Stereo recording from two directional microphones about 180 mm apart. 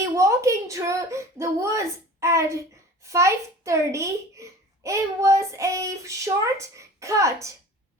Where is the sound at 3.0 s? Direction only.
15° right (ahead or behind).